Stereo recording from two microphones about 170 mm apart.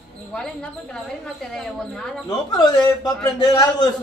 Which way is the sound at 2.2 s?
25° left (ahead or behind).